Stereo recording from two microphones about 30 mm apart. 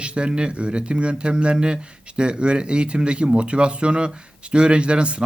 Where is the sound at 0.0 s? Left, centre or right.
Right.